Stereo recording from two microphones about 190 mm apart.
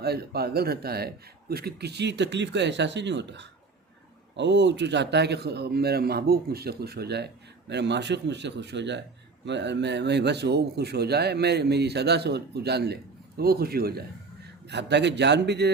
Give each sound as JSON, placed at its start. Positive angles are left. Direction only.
{"t": 0.0, "sound": "speech", "side_deg": -55}
{"t": 14.7, "sound": "speech", "side_deg": -65}